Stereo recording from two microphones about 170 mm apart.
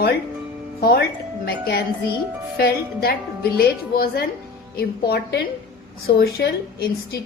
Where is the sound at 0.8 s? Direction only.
70° left (ahead or behind).